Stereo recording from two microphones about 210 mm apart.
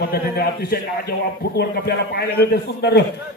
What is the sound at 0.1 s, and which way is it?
A man's voice, 45° left (ahead or behind).